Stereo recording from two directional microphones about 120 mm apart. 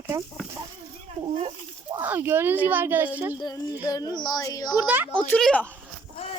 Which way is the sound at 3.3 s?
35° left (ahead or behind).